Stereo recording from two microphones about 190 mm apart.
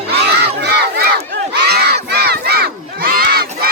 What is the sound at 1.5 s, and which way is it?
Crowd, 60° right (ahead or behind).